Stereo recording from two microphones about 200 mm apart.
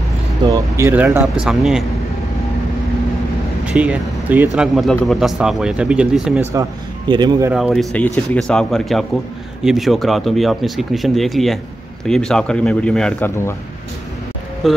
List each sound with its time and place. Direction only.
0.5 s speech: 15° right (ahead or behind)
3.6 s speech: 5° right (ahead or behind)
7.1 s speech: 20° right (ahead or behind)
7.5 s speech: centre (ahead or behind)